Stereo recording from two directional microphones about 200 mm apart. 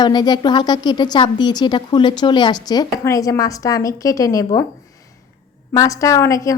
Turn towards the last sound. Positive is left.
turn(degrees=15)  # may be behind; listen again after turning